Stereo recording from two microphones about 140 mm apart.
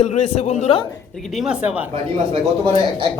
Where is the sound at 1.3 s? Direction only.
5° right (ahead or behind).